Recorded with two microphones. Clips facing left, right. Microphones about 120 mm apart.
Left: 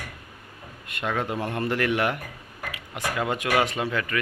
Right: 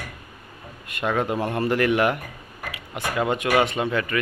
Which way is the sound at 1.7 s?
15° right (ahead or behind).